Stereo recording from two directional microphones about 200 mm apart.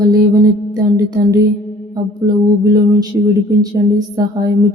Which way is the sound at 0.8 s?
15° right (ahead or behind).